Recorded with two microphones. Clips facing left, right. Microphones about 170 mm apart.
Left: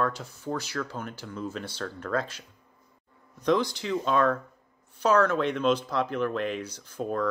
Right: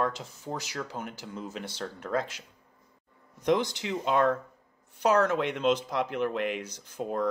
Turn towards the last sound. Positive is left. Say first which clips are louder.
# left 1 dB
turn(degrees=-15)  # may be behind; listen again after turning